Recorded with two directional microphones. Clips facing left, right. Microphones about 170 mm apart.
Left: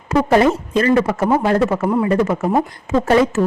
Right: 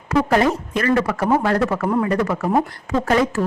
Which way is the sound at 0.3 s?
25° left (ahead or behind).